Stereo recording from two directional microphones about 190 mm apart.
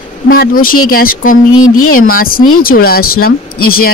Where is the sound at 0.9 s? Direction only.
50° left (ahead or behind).